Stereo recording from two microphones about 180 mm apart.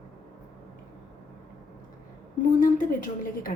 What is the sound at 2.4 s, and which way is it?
A woman's voice, 50° left (ahead or behind).